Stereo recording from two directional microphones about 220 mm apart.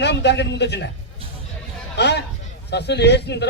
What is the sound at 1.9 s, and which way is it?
Speech, 50° left (ahead or behind).